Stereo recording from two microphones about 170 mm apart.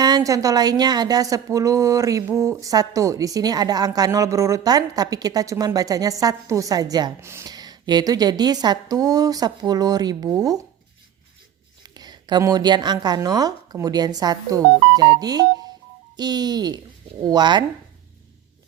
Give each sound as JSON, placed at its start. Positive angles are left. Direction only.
{"t": 0.0, "sound": "a woman's voice", "side_deg": -20}
{"t": 11.8, "sound": "a woman's voice", "side_deg": -25}